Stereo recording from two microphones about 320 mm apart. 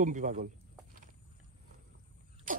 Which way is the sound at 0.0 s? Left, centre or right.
Right.